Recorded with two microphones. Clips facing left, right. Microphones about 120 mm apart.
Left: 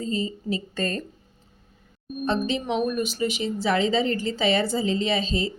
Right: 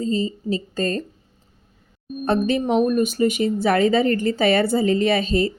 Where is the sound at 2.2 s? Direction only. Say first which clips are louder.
Right 5 dB; 60° right (ahead or behind).